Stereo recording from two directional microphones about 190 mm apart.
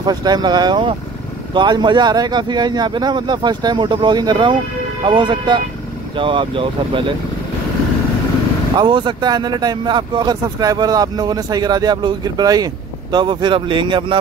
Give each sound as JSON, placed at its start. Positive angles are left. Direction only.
{"t": 0.0, "sound": "speech", "side_deg": -20}
{"t": 8.7, "sound": "speech", "side_deg": -25}